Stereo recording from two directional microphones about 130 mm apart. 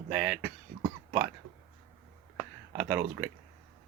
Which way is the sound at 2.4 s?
10° right (ahead or behind).